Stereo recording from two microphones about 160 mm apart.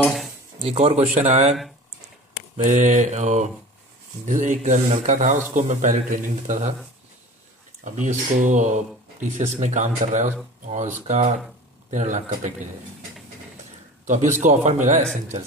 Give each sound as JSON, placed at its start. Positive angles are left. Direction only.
{"t": 0.6, "sound": "speech", "side_deg": -35}
{"t": 7.8, "sound": "speech", "side_deg": -50}
{"t": 14.0, "sound": "a man's voice", "side_deg": -50}